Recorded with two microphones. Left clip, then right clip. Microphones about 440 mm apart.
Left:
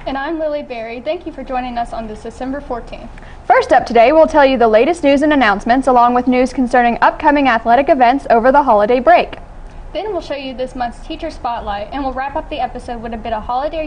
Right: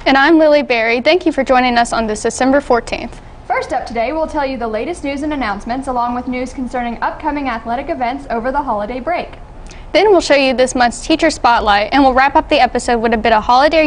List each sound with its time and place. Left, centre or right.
0.0 s a woman's voice: right
3.4 s a woman's voice: left
9.9 s a woman's voice: right